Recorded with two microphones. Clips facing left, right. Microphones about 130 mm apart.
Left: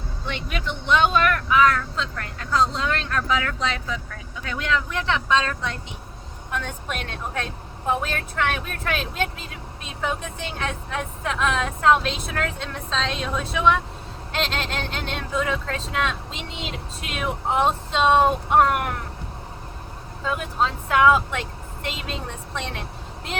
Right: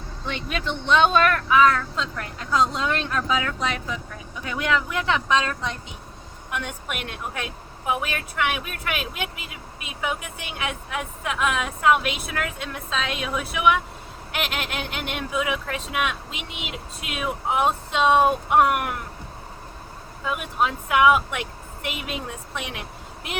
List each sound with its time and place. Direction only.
0.5 s speech: 20° right (ahead or behind)
20.2 s a woman's voice: 15° right (ahead or behind)